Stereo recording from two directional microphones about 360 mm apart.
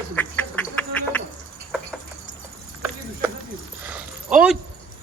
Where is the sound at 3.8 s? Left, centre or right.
Centre.